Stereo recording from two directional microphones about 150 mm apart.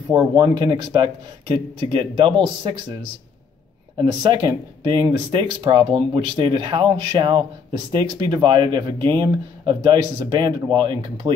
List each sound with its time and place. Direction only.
0.1 s speech: 25° right (ahead or behind)